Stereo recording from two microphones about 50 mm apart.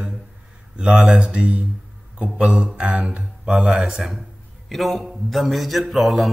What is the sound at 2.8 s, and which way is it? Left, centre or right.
Speech, right.